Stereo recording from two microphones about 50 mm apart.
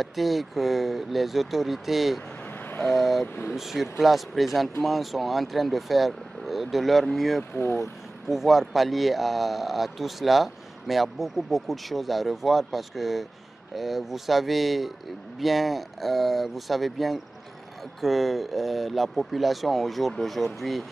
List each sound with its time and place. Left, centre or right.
0.0 s speech: centre
7.5 s speech: left
8.3 s speech: centre